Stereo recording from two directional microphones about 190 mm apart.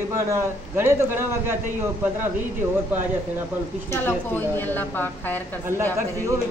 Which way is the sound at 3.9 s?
10° left (ahead or behind).